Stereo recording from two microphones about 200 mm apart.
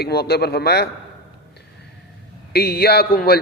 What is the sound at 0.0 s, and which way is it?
Speech, 55° left (ahead or behind).